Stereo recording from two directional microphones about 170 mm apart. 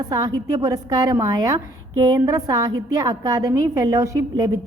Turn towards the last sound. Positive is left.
turn(degrees=-20)  # may be behind; listen again after turning